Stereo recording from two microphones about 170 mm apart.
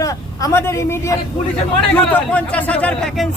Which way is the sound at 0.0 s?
20° left (ahead or behind).